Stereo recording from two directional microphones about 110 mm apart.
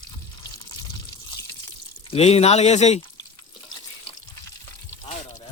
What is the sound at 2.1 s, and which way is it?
Speech, 70° left (ahead or behind).